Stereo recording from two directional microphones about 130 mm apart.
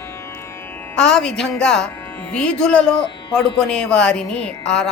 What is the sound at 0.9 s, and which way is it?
A woman's voice, 5° left (ahead or behind).